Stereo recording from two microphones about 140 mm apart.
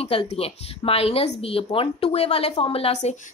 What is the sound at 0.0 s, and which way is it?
Speech, 45° left (ahead or behind).